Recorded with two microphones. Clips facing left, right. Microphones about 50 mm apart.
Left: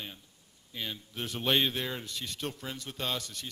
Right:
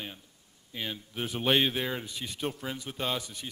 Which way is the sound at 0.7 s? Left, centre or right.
Centre.